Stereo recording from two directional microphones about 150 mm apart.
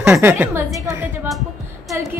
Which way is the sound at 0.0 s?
15° right (ahead or behind).